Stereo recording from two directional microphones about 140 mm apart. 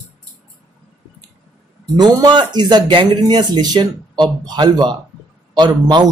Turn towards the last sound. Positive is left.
turn(degrees=-30)  # may be behind; listen again after turning